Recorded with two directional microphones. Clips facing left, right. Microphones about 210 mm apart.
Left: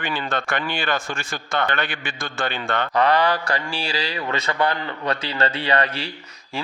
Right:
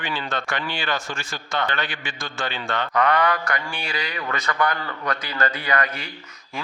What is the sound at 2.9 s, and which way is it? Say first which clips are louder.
A man's voice: left 2 dB; 30° left (ahead or behind).